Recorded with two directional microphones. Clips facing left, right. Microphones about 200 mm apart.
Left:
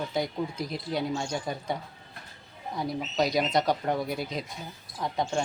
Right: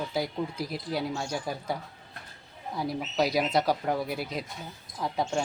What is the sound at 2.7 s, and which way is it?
Speech, 5° right (ahead or behind).